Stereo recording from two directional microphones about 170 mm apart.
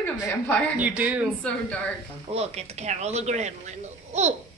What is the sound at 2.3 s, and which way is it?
Speech, 40° right (ahead or behind).